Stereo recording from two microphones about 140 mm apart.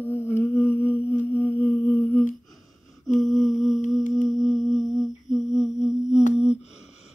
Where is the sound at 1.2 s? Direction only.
15° left (ahead or behind).